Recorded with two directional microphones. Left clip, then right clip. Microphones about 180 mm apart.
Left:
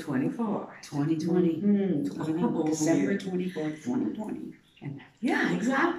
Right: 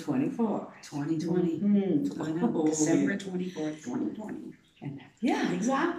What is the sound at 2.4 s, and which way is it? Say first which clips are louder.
Speech: right 1 dB; 10° left (ahead or behind).